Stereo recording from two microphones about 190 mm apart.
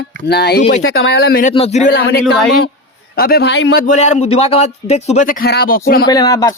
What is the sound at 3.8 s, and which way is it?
Speech, 40° left (ahead or behind).